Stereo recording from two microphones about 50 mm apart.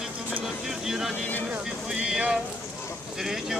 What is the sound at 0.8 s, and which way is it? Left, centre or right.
Speech, centre.